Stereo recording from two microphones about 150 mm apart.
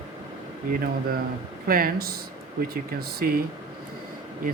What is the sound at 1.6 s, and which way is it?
Speech, 75° right (ahead or behind).